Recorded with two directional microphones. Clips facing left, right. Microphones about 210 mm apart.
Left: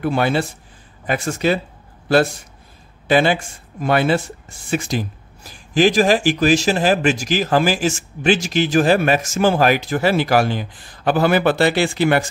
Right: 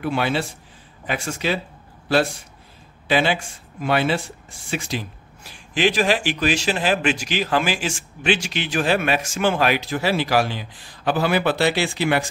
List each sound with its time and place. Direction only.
0.0 s speech: 45° left (ahead or behind)
3.1 s speech: 45° left (ahead or behind)